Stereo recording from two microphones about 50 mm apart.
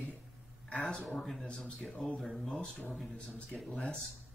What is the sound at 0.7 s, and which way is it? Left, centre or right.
Speech, centre.